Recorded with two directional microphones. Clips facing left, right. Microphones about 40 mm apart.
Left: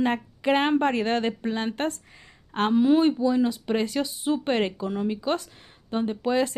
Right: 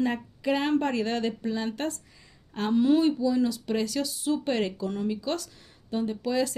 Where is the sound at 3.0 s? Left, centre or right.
Left.